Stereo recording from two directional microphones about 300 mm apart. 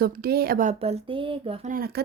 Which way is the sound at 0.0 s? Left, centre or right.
Right.